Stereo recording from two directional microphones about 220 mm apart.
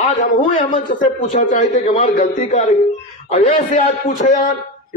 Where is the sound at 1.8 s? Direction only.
30° left (ahead or behind).